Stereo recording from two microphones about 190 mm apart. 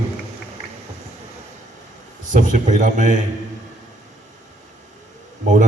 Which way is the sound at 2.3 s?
40° right (ahead or behind).